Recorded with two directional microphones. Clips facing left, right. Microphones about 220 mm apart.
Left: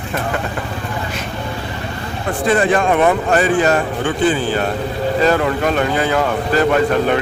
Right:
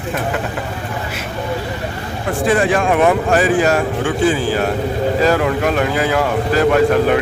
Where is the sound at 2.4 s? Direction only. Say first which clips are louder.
Even; centre (ahead or behind).